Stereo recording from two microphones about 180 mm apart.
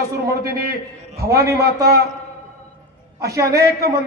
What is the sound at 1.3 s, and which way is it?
Speech, 15° right (ahead or behind).